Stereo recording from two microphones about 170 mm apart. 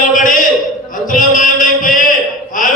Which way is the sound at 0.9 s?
50° left (ahead or behind).